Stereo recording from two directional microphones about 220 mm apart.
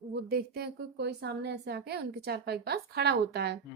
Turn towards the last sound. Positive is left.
turn(degrees=-45)  # may be behind; listen again after turning